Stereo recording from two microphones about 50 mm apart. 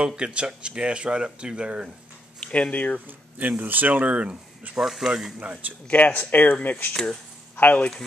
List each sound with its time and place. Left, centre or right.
0.0 s speech: centre
2.4 s speech: left
3.1 s speech: right
4.7 s speech: centre
5.4 s speech: right
5.9 s speech: left
6.9 s speech: centre
7.5 s speech: left